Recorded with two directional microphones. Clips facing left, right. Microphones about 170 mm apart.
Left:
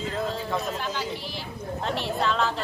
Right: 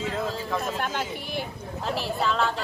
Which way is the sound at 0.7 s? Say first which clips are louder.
Right 1 dB; 55° right (ahead or behind).